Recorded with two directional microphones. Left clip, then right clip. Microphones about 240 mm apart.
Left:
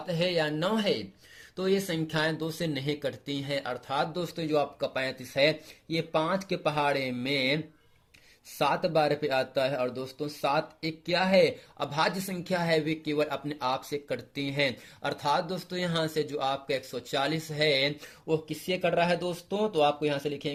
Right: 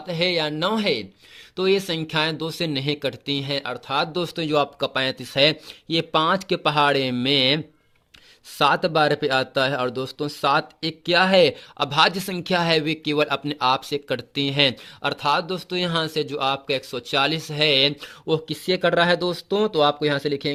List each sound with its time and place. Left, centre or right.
0.1 s speech: right